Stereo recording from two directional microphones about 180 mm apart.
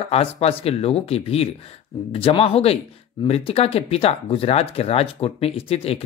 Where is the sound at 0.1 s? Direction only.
35° left (ahead or behind).